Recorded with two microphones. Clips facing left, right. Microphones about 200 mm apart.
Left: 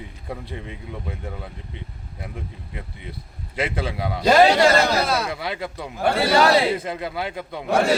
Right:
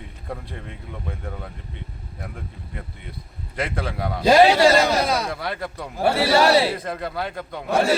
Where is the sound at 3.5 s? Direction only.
Centre (ahead or behind).